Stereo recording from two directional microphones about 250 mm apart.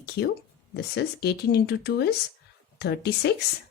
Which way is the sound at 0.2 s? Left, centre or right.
Left.